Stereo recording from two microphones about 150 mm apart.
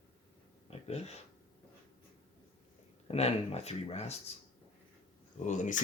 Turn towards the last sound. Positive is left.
turn(degrees=55)  # may be behind; listen again after turning